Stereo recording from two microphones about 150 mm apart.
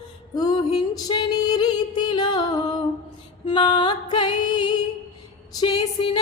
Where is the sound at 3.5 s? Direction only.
30° left (ahead or behind).